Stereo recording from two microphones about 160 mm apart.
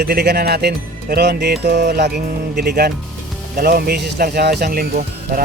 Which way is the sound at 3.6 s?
70° right (ahead or behind).